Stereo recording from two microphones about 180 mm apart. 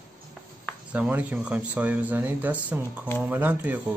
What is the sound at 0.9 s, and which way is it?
Speech, 10° right (ahead or behind).